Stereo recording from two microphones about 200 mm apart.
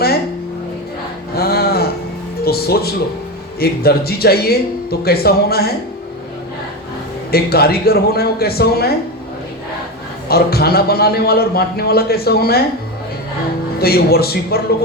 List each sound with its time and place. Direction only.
1.4 s a sound: 50° left (ahead or behind)
2.4 s a man's voice: 50° left (ahead or behind)
7.3 s a man's voice: 50° left (ahead or behind)
10.2 s a man's voice: 50° left (ahead or behind)
13.7 s a man's voice: 50° left (ahead or behind)